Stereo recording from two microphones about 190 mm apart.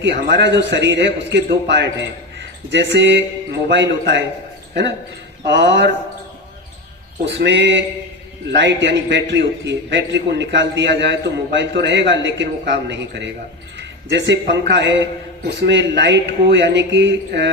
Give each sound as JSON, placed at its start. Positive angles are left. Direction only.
{"t": 0.3, "sound": "a man's voice", "side_deg": -65}
{"t": 7.3, "sound": "a man's voice", "side_deg": -70}